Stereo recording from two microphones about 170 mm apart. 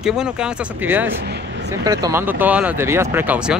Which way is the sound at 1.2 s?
85° right.